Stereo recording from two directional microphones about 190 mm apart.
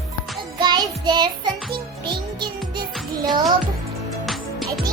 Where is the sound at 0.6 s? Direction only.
25° right (ahead or behind).